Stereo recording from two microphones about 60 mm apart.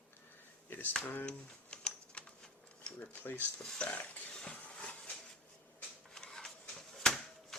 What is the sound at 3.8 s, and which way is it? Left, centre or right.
Speech, centre.